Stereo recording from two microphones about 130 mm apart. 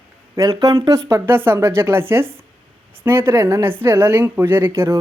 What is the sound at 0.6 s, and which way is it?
Speech, 30° right (ahead or behind).